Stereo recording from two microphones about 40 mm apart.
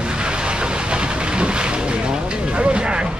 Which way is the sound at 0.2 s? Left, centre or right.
Right.